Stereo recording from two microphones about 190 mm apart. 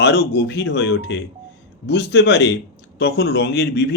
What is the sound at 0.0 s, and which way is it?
Speech, 60° left (ahead or behind).